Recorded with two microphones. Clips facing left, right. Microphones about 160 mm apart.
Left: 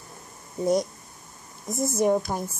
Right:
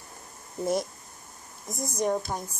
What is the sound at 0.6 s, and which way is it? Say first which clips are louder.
Music: left 4 dB; 5° right (ahead or behind).